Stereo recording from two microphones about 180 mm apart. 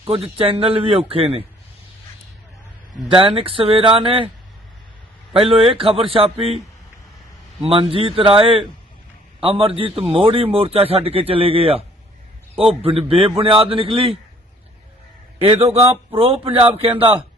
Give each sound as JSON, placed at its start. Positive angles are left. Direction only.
{"t": 0.1, "sound": "speech", "side_deg": -30}
{"t": 3.2, "sound": "speech", "side_deg": -30}
{"t": 5.3, "sound": "speech", "side_deg": -30}
{"t": 7.7, "sound": "speech", "side_deg": -30}
{"t": 15.4, "sound": "speech", "side_deg": -35}